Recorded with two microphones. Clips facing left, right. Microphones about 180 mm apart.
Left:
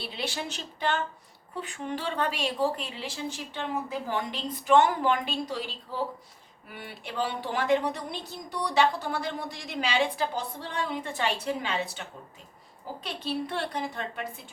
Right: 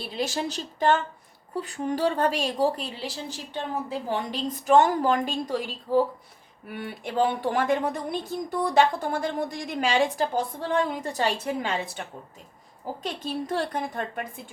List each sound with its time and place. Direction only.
0.0 s a woman's voice: 45° right (ahead or behind)